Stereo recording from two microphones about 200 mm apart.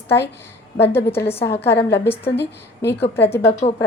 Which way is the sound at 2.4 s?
55° left (ahead or behind).